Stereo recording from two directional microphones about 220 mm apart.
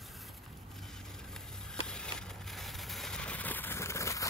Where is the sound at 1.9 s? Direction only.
5° left (ahead or behind).